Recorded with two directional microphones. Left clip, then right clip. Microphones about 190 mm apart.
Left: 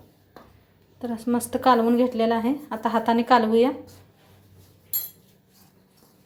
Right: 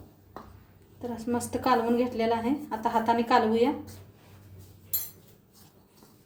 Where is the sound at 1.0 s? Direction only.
40° left (ahead or behind).